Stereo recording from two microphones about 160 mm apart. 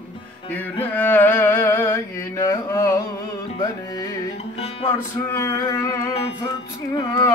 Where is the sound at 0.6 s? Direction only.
10° left (ahead or behind).